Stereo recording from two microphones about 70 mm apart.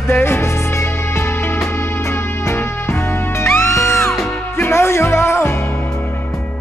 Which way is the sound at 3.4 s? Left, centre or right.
Left.